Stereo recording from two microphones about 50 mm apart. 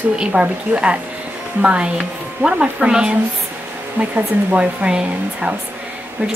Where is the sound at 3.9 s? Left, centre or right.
Right.